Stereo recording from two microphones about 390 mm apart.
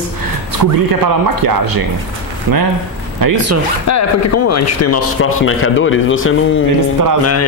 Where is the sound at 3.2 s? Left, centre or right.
Right.